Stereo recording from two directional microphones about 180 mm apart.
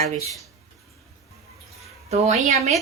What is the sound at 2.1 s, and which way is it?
Speech, 35° right (ahead or behind).